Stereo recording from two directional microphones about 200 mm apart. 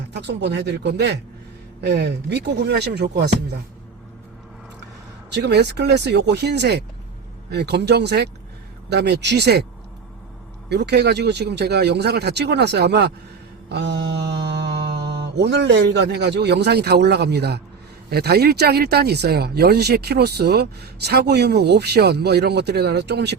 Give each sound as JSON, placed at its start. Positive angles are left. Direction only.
{"t": 0.1, "sound": "speech", "side_deg": -60}
{"t": 5.3, "sound": "speech", "side_deg": -55}
{"t": 10.7, "sound": "speech", "side_deg": -55}
{"t": 13.7, "sound": "mantra", "side_deg": -60}
{"t": 15.4, "sound": "speech", "side_deg": -60}